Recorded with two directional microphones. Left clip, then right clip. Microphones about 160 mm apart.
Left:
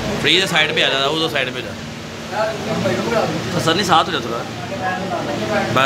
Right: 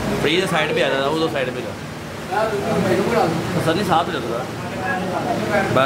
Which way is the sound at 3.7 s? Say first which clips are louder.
Left 4 dB; 15° left (ahead or behind).